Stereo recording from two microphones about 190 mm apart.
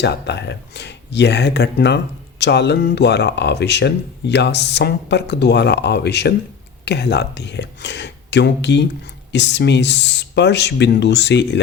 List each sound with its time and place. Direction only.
0.0 s speech: 65° left (ahead or behind)